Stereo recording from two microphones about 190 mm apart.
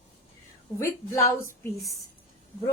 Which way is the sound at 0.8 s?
15° left (ahead or behind).